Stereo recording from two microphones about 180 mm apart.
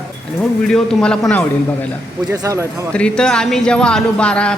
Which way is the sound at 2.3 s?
15° right (ahead or behind).